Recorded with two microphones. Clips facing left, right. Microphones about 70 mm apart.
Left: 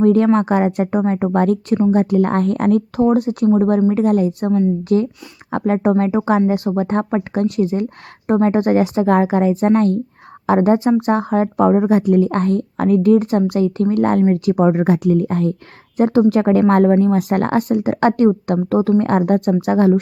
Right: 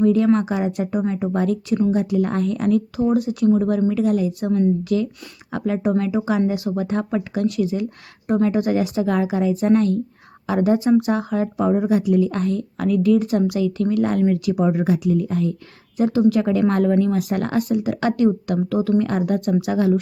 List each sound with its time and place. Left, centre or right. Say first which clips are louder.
0.0 s a woman's voice: left 3 dB; left